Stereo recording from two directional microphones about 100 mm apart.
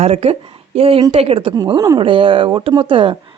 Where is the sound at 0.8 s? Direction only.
75° right (ahead or behind).